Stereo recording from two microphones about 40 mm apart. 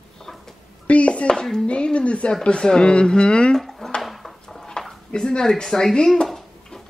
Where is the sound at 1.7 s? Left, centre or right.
Left.